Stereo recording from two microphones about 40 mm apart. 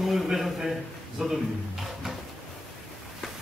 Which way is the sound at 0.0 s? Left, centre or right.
Centre.